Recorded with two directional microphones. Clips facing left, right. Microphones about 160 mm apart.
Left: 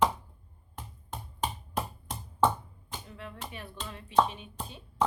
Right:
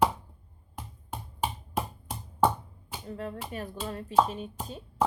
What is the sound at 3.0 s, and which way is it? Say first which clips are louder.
Speech: right 10 dB; 40° right (ahead or behind).